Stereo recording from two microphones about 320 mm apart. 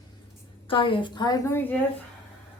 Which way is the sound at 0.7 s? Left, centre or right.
Centre.